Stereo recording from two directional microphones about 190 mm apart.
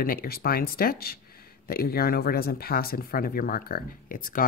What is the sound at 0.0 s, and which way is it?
Speech, 50° left (ahead or behind).